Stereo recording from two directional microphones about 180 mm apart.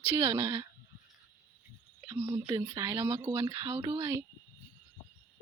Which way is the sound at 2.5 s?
15° right (ahead or behind).